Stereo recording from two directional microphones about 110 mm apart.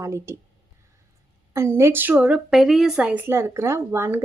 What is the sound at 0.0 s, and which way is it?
Speech, 25° right (ahead or behind).